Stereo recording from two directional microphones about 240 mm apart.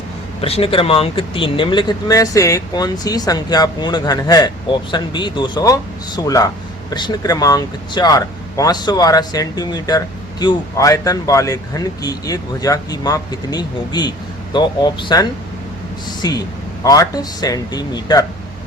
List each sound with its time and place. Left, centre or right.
0.4 s speech: left